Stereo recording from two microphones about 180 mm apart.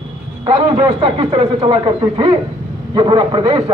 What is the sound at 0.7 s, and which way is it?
A man's voice, 25° right (ahead or behind).